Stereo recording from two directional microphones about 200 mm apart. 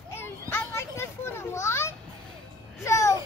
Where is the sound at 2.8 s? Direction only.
15° left (ahead or behind).